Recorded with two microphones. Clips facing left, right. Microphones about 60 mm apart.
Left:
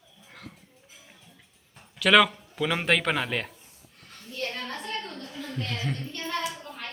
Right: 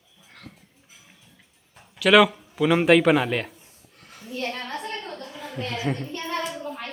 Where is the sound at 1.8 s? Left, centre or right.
Centre.